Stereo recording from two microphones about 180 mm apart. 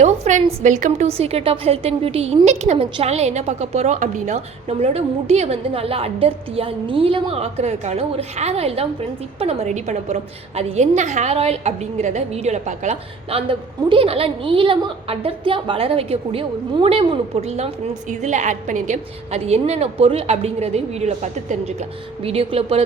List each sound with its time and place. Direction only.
0.0 s a woman's voice: 40° right (ahead or behind)